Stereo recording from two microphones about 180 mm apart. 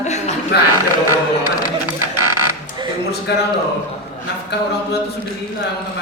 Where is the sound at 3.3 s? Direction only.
70° left (ahead or behind).